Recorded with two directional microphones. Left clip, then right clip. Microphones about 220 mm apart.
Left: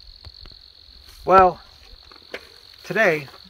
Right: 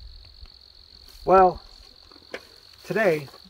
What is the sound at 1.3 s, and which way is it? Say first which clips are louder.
Cricket: left 3 dB; centre (ahead or behind).